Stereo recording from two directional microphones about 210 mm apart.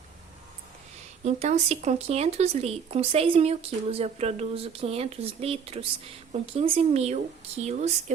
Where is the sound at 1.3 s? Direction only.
30° right (ahead or behind).